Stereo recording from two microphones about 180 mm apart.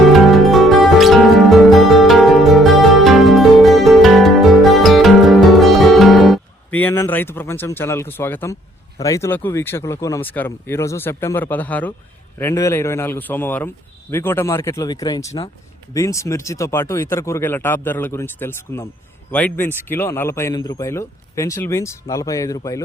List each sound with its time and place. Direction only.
0.1 s music: centre (ahead or behind)
9.0 s speech: 15° left (ahead or behind)